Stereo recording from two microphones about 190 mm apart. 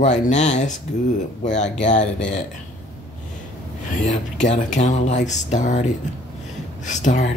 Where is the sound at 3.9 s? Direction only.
40° left (ahead or behind).